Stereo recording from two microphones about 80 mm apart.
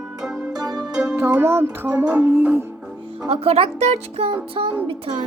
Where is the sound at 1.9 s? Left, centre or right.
Centre.